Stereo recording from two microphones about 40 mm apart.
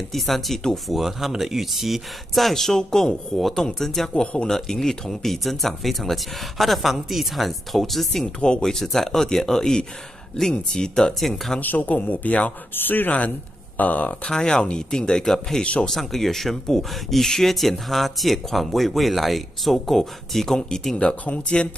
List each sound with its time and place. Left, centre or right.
0.1 s speech: centre
8.4 s speech: left
8.6 s speech: centre
11.1 s speech: centre
11.6 s speech: left
12.7 s speech: left
13.7 s speech: left
14.2 s speech: centre
15.6 s speech: left
15.9 s speech: centre
20.9 s speech: left